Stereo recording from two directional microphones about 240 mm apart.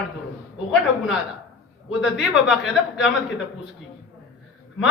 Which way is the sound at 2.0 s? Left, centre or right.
Centre.